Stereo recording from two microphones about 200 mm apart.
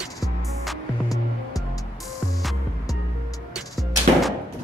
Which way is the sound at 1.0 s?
15° left (ahead or behind).